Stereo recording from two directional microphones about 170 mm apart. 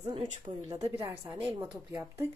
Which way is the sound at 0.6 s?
20° right (ahead or behind).